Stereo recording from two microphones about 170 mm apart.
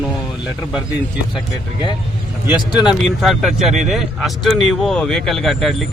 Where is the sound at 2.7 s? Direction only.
5° right (ahead or behind).